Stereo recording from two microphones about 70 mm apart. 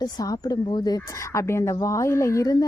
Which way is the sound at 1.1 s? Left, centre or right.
Left.